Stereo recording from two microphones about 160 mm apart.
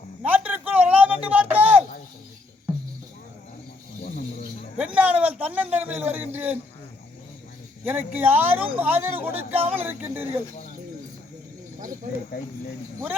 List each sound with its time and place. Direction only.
0.2 s a sound: 10° right (ahead or behind)
4.0 s jingle bell: 50° left (ahead or behind)
4.8 s a man's voice: 10° right (ahead or behind)
7.9 s a man's voice: 10° right (ahead or behind)